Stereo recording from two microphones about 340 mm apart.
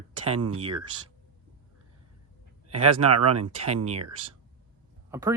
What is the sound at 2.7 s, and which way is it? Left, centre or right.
Speech, right.